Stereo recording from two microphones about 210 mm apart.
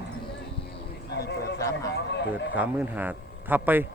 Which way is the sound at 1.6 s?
15° left (ahead or behind).